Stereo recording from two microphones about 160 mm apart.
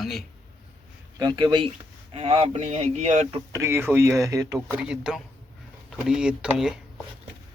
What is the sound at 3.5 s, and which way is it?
Speech, 15° right (ahead or behind).